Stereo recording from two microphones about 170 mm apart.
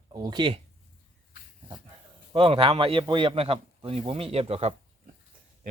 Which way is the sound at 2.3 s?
35° right (ahead or behind).